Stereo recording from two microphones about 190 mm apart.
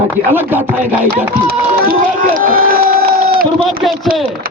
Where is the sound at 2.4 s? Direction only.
50° right (ahead or behind).